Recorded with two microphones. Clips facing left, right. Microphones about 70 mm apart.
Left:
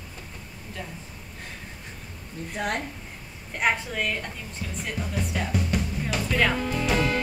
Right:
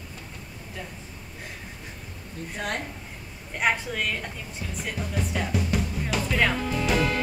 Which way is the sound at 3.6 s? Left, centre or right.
Centre.